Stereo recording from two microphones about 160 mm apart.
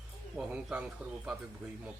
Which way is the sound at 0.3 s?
10° right (ahead or behind).